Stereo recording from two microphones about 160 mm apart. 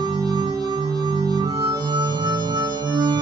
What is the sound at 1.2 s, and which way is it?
Harmonica, 25° right (ahead or behind).